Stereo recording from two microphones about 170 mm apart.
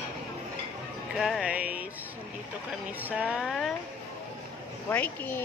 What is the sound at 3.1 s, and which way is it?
Speech, 5° right (ahead or behind).